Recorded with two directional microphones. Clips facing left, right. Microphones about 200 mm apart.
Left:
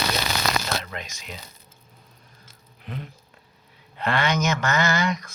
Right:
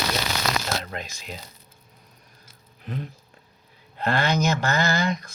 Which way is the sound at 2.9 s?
40° right (ahead or behind).